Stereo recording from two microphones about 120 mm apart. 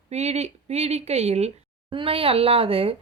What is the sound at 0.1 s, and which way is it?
A woman's voice, 65° right (ahead or behind).